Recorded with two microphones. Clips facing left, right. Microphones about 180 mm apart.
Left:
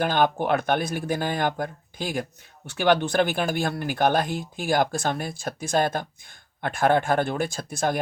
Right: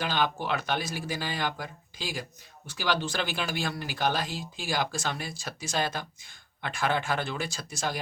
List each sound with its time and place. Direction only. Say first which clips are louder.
0.0 s speech: left 7 dB; 50° left (ahead or behind)